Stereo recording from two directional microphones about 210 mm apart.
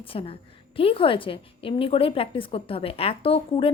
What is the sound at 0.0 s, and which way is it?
A woman's voice, 25° left (ahead or behind).